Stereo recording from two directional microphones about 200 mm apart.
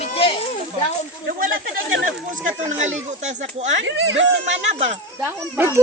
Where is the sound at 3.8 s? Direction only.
65° right (ahead or behind).